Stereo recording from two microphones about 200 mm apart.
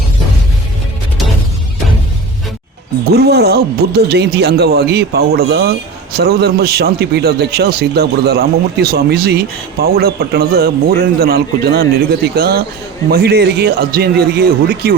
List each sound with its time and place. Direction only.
3.1 s a man's voice: 55° right (ahead or behind)